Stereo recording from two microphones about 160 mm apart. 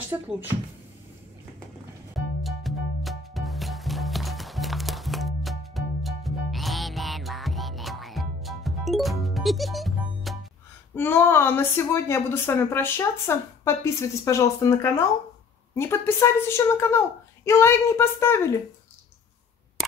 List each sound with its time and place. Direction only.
2.1 s music: centre (ahead or behind)
11.0 s a woman's voice: 15° left (ahead or behind)